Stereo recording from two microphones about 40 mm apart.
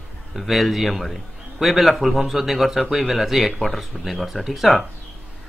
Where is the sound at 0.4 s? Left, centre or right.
Centre.